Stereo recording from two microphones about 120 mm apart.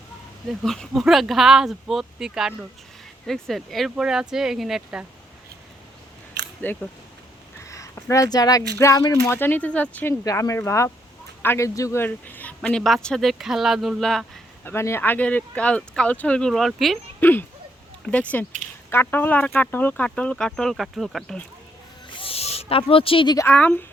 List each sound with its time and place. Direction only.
0.4 s speech: centre (ahead or behind)
3.2 s speech: 5° left (ahead or behind)
6.6 s speech: 15° left (ahead or behind)
7.6 s a sound: 25° left (ahead or behind)
7.9 s speech: 25° left (ahead or behind)
9.3 s speech: 15° left (ahead or behind)
10.2 s speech: 25° left (ahead or behind)
12.0 s speech: 15° left (ahead or behind)
14.6 s speech: 20° left (ahead or behind); by 17.0 s centre (ahead or behind)
17.2 s speech: 15° left (ahead or behind)
22.1 s snake: 50° left (ahead or behind)
23.5 s speech: 15° left (ahead or behind)